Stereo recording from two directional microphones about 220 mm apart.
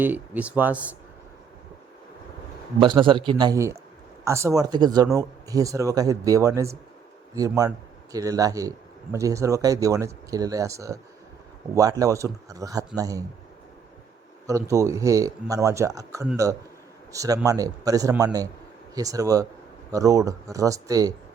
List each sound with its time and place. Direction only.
0.0 s speech: 5° right (ahead or behind)
2.8 s a man's voice: 20° right (ahead or behind)
14.4 s speech: 15° right (ahead or behind)